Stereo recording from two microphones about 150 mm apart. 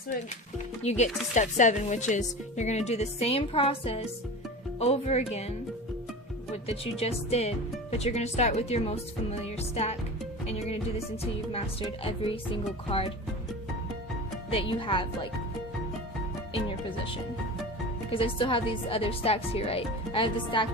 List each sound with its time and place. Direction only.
0.8 s speech: 50° left (ahead or behind)
9.4 s music: 45° left (ahead or behind)
11.5 s speech: 40° left (ahead or behind)
14.5 s speech: 35° left (ahead or behind)
18.1 s speech: 35° left (ahead or behind)